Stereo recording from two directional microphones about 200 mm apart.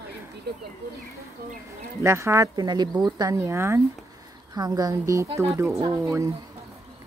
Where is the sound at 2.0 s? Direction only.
15° right (ahead or behind).